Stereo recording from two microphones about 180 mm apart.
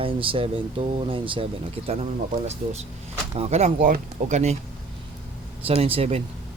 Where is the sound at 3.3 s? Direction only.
35° right (ahead or behind).